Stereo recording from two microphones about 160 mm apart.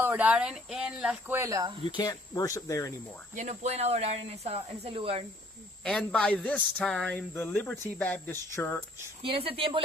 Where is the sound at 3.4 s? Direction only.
45° right (ahead or behind).